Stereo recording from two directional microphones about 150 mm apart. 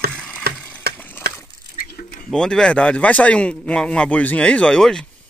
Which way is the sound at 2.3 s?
5° left (ahead or behind).